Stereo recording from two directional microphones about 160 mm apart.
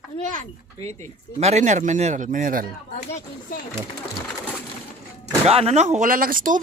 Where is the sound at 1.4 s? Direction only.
45° right (ahead or behind).